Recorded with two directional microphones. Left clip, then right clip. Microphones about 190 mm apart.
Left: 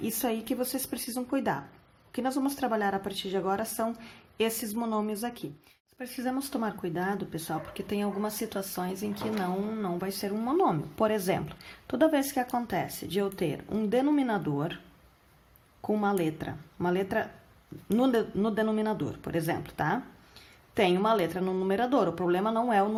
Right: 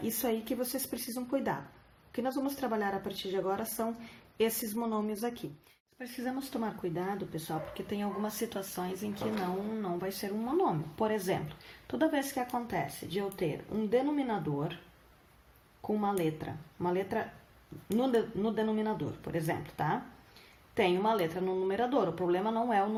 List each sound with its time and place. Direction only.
0.0 s speech: 30° left (ahead or behind); by 14.8 s 50° left (ahead or behind)
15.9 s speech: 50° left (ahead or behind)